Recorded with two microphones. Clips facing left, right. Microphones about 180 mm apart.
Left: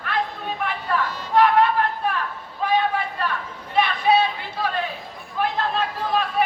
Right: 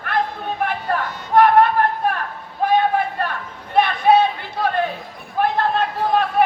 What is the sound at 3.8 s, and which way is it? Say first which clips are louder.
Chatter: right 4 dB; 55° right (ahead or behind).